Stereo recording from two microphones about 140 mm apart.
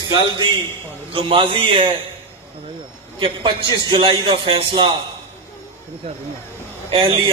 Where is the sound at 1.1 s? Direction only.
40° right (ahead or behind).